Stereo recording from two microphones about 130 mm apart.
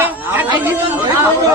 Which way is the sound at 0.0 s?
15° right (ahead or behind).